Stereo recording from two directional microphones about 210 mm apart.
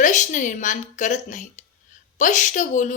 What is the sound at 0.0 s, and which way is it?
A woman's voice, 35° left (ahead or behind).